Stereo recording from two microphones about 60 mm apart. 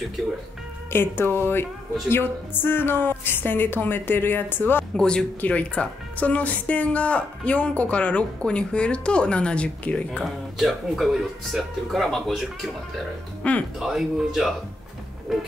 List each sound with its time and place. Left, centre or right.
0.8 s a woman's voice: left
4.9 s speech: centre
5.4 s speech: left
10.2 s speech: centre
13.4 s speech: left
13.7 s speech: centre
15.3 s music: centre